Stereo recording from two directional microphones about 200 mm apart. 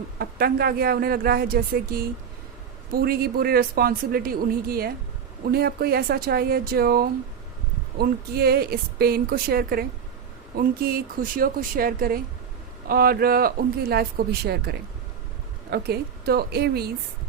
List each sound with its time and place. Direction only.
0.2 s speech: 50° right (ahead or behind)